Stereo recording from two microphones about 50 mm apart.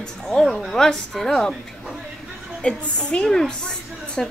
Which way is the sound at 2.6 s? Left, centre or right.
Centre.